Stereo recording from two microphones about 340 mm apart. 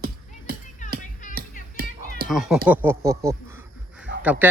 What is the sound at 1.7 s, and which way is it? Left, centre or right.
Music, right.